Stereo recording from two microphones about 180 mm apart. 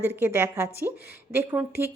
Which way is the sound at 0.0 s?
10° right (ahead or behind).